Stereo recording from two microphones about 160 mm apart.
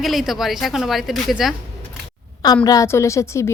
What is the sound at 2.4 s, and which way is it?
A woman's voice, 25° left (ahead or behind).